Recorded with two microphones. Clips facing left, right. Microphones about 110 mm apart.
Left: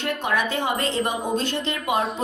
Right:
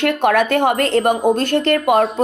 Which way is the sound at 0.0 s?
65° right (ahead or behind).